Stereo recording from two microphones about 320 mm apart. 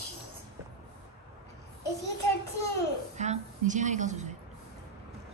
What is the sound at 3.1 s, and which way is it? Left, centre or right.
Music, right.